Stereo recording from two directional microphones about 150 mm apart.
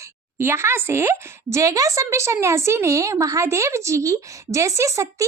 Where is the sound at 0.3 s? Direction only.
15° right (ahead or behind).